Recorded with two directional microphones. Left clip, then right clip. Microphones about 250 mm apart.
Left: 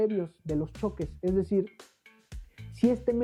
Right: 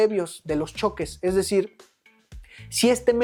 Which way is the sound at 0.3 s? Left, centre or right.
Centre.